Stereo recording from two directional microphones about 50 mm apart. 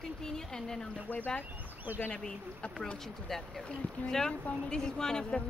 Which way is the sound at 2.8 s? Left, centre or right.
Centre.